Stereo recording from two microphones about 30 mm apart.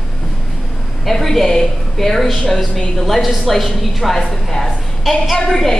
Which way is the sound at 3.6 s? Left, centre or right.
Centre.